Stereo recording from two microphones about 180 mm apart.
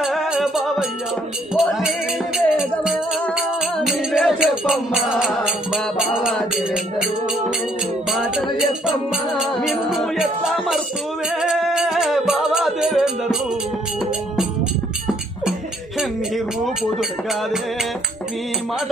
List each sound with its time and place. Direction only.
0.0 s music: centre (ahead or behind)
8.1 s music: centre (ahead or behind)